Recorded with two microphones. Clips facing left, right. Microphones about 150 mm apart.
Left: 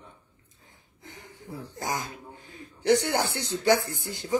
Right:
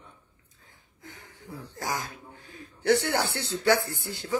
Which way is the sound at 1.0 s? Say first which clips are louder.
Left 2 dB; 20° left (ahead or behind).